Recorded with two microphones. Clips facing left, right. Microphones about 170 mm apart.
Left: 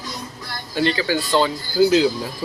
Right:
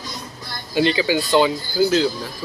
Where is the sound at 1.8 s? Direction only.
5° left (ahead or behind).